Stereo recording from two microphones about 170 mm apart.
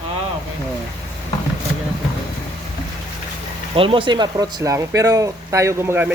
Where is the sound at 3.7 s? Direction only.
30° right (ahead or behind).